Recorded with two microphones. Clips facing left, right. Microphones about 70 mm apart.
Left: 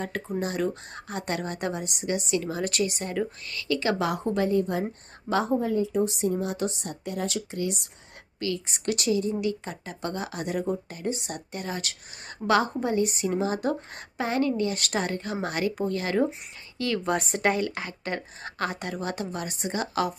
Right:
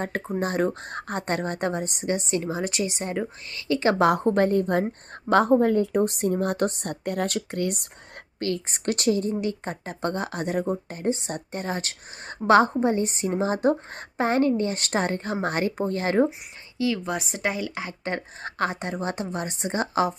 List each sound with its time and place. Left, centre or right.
0.0 s a woman's voice: right
8.4 s a woman's voice: right
16.7 s a woman's voice: centre
18.0 s a woman's voice: right